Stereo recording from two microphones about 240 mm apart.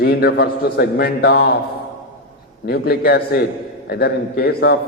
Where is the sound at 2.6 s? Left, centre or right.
Left.